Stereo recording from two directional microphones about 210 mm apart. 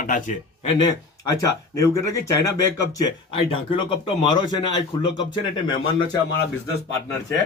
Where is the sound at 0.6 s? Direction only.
20° left (ahead or behind).